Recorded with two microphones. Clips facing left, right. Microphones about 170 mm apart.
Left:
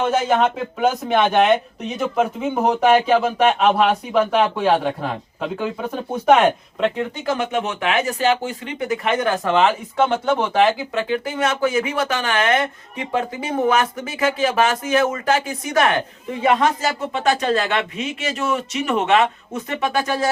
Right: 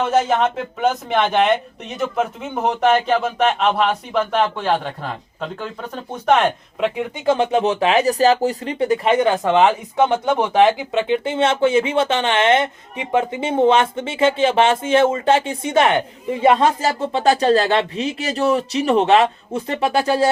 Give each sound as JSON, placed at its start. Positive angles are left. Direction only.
{"t": 0.3, "sound": "speech", "side_deg": 0}
{"t": 6.7, "sound": "speech", "side_deg": -5}
{"t": 7.3, "sound": "speech", "side_deg": -30}